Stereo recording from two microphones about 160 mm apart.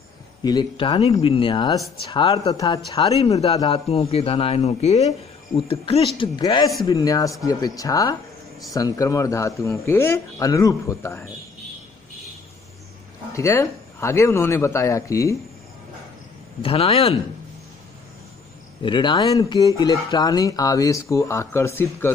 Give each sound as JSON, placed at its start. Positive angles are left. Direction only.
{"t": 0.4, "sound": "a man's voice", "side_deg": 30}
{"t": 3.2, "sound": "a man's voice", "side_deg": 40}
{"t": 13.3, "sound": "speech", "side_deg": 20}
{"t": 16.6, "sound": "a man's voice", "side_deg": 35}
{"t": 18.8, "sound": "speech", "side_deg": 30}